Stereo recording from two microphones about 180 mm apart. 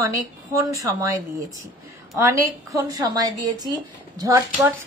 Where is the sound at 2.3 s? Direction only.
20° right (ahead or behind).